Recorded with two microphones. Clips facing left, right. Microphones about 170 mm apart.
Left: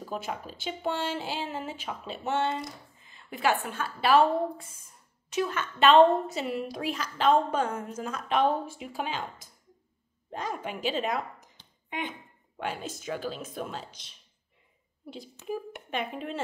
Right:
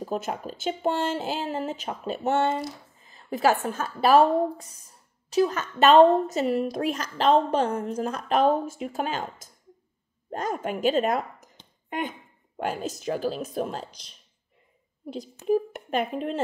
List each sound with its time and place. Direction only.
0.0 s a woman's voice: 45° right (ahead or behind)
12.5 s a woman's voice: 40° right (ahead or behind)
15.4 s speech: 45° right (ahead or behind)